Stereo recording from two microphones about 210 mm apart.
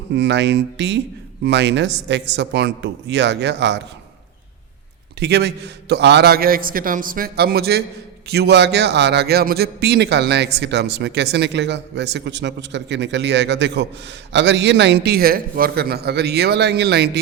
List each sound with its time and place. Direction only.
0.1 s a man's voice: 55° right (ahead or behind)
5.2 s a man's voice: 55° right (ahead or behind)